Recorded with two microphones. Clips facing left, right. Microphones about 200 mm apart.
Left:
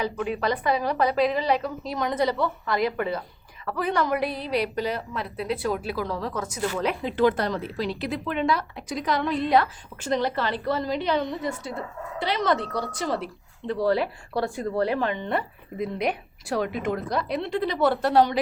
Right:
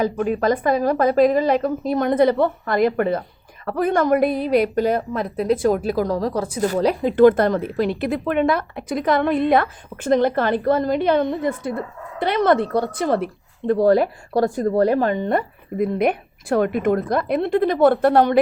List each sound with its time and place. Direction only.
0.0 s a woman's voice: 45° right (ahead or behind)